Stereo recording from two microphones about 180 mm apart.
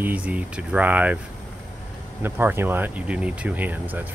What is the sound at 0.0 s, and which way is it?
Speech, 10° right (ahead or behind).